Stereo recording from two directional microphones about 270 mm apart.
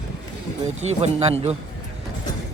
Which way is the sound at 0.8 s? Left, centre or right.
Right.